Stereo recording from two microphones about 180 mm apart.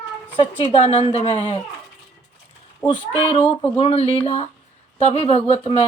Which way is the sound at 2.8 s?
25° left (ahead or behind).